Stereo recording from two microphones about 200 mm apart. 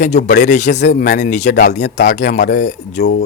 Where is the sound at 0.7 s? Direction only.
55° left (ahead or behind).